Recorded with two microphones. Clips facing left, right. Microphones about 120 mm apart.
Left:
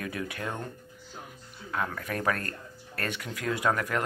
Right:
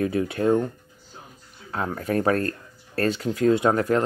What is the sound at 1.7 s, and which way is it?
Speech, 30° right (ahead or behind).